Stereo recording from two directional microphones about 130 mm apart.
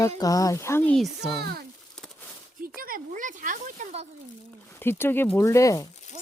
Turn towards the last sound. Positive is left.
turn(degrees=25)  # may be behind; listen again after turning